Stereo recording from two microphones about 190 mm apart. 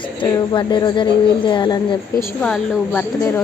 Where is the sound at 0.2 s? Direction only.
25° left (ahead or behind).